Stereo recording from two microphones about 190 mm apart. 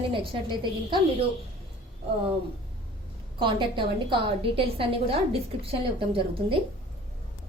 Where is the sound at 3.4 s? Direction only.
25° right (ahead or behind).